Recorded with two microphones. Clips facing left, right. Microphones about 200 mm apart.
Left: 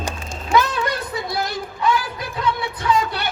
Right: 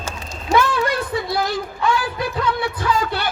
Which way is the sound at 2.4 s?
25° left (ahead or behind).